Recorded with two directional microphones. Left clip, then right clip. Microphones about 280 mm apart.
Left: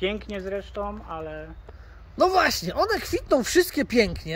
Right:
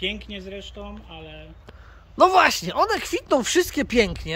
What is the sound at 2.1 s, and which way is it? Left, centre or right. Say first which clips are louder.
Speech: right 4 dB; centre.